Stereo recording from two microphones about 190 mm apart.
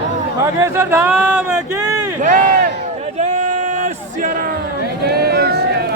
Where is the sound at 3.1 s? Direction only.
40° right (ahead or behind).